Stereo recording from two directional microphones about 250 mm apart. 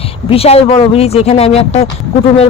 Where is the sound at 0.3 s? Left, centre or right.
Left.